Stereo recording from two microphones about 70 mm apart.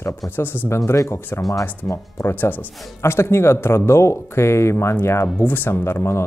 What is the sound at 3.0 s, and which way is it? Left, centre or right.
Speech, left.